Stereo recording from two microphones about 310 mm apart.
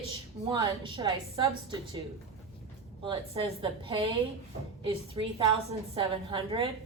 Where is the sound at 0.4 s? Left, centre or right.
Centre.